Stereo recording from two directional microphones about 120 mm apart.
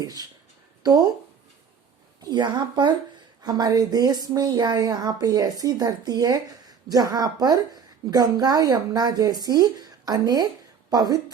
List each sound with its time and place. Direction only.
0.0 s a woman's voice: 30° right (ahead or behind)
2.2 s a woman's voice: 35° right (ahead or behind)